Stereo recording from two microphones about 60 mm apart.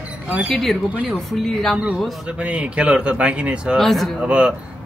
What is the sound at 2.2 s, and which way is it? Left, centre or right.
Speech, centre.